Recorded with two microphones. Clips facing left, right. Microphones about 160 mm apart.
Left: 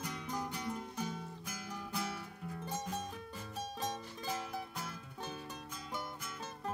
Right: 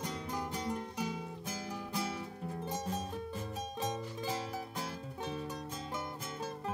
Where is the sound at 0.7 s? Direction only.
10° right (ahead or behind).